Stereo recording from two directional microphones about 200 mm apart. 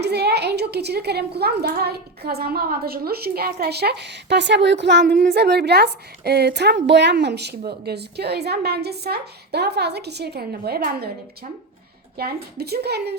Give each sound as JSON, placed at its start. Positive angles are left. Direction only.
{"t": 0.0, "sound": "a woman's voice", "side_deg": -55}
{"t": 12.1, "sound": "speech", "side_deg": -50}